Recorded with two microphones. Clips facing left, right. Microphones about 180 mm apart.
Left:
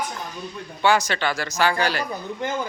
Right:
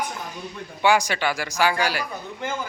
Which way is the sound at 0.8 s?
15° right (ahead or behind).